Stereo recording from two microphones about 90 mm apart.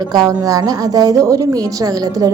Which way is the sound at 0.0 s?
45° right (ahead or behind).